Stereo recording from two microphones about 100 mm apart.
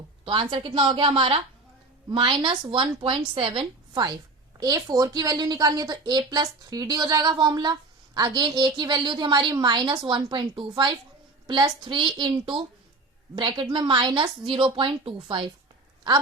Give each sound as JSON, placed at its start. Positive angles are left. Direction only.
{"t": 0.3, "sound": "a woman's voice", "side_deg": -65}
{"t": 2.0, "sound": "a woman's voice", "side_deg": -55}
{"t": 4.6, "sound": "a woman's voice", "side_deg": -40}